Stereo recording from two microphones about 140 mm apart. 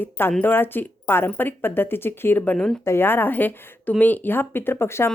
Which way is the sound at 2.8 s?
15° left (ahead or behind).